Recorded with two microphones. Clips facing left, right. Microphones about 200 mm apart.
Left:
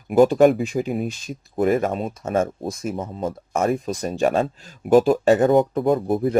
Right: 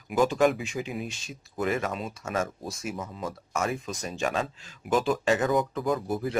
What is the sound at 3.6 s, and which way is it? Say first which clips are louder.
Speech: left 9 dB; 50° left (ahead or behind).